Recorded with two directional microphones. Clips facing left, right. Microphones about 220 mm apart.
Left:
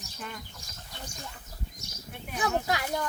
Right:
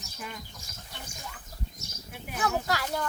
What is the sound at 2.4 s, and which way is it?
Speech, 15° left (ahead or behind).